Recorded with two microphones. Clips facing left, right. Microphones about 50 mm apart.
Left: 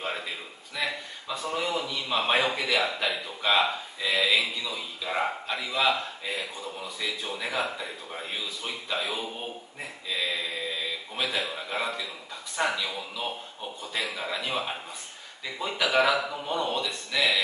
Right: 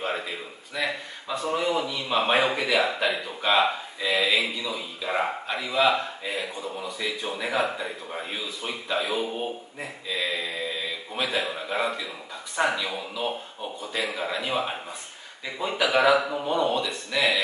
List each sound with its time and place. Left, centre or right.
1.3 s a man's voice: centre